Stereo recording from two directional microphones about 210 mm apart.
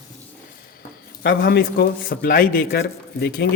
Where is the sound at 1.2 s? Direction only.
50° left (ahead or behind).